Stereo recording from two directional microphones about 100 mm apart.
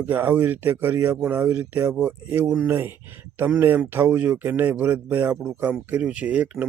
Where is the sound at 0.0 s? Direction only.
20° right (ahead or behind).